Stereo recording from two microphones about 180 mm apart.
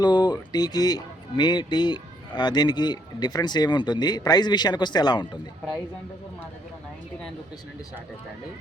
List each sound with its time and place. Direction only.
0.0 s speech: 25° left (ahead or behind)